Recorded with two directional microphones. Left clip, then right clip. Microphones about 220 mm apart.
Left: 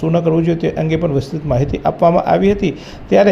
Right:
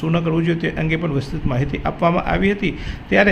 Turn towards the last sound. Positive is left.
turn(degrees=10)  # may be behind; listen again after turning